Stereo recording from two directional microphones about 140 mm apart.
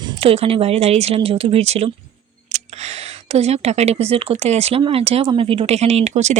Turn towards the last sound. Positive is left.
turn(degrees=-55)  # may be behind; listen again after turning